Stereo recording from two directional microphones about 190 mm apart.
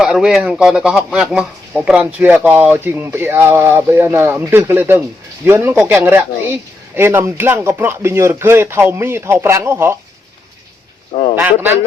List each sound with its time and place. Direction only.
0.0 s speech: 5° right (ahead or behind)
11.1 s a sound: 30° left (ahead or behind)
11.3 s speech: 10° right (ahead or behind)